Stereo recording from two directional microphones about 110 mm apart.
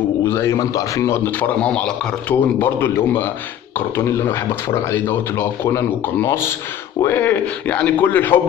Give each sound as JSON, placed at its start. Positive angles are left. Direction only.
{"t": 0.2, "sound": "a man's voice", "side_deg": 25}